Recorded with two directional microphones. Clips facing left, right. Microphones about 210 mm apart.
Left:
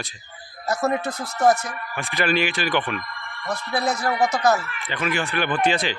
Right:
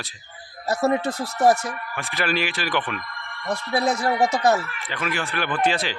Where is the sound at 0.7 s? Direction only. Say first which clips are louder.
Right 2 dB; 30° right (ahead or behind).